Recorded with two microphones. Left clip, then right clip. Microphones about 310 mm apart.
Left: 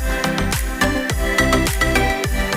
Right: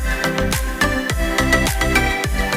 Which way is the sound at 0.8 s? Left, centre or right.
Centre.